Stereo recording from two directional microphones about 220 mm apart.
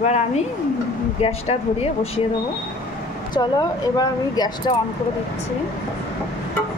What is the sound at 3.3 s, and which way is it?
Speech, 20° left (ahead or behind).